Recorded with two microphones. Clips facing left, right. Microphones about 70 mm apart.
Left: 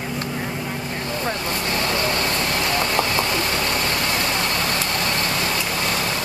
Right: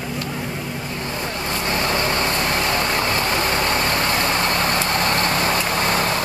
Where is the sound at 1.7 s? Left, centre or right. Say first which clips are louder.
Right 2 dB; right.